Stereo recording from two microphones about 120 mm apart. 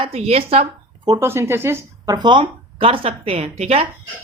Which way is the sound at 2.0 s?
35° right (ahead or behind).